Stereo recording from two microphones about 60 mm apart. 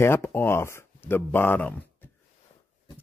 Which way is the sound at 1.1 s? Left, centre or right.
Left.